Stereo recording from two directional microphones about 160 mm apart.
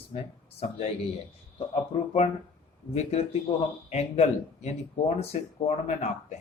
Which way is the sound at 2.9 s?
45° left (ahead or behind).